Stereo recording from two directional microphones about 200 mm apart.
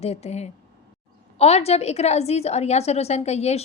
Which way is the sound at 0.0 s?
30° left (ahead or behind).